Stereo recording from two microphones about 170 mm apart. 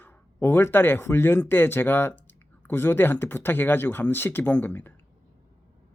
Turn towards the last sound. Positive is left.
turn(degrees=10)  # may be behind; listen again after turning